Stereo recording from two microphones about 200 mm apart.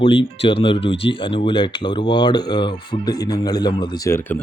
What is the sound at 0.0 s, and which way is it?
Speech, 25° left (ahead or behind).